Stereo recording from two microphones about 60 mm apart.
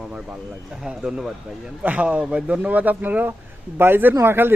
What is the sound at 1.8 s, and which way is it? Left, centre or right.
Speech, right.